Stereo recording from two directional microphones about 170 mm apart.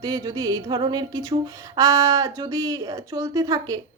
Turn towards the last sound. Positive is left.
turn(degrees=-20)  # may be behind; listen again after turning